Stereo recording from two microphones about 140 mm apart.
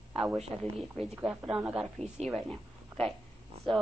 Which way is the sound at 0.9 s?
5° right (ahead or behind).